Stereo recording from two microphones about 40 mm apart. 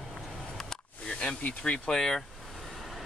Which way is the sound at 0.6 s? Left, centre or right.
Centre.